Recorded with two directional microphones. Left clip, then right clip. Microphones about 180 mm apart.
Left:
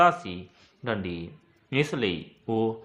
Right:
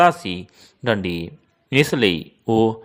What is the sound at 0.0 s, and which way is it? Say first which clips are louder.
A man's voice: right 5 dB; 40° right (ahead or behind).